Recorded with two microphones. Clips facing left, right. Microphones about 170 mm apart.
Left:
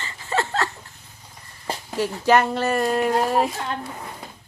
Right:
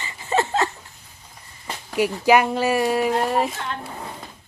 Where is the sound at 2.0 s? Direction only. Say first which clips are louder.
Right 2 dB; 10° right (ahead or behind).